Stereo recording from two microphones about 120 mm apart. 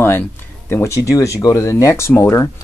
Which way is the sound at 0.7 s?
25° left (ahead or behind).